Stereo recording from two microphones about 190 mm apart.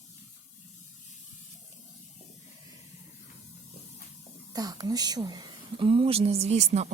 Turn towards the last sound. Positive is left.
turn(degrees=-35)  # may be behind; listen again after turning